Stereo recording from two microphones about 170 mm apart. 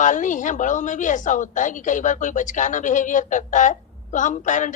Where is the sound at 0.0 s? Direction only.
50° left (ahead or behind).